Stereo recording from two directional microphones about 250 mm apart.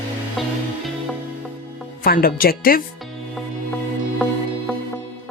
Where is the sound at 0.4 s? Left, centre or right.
Centre.